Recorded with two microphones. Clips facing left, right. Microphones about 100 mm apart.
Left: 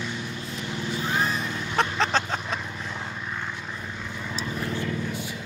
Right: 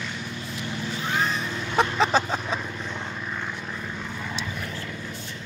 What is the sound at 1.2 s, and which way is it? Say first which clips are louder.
Vehicle: even; 5° left (ahead or behind).